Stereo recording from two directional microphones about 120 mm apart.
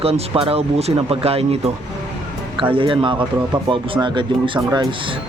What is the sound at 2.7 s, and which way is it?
Speech, 45° right (ahead or behind).